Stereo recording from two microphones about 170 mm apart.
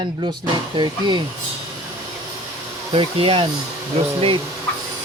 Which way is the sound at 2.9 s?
35° right (ahead or behind).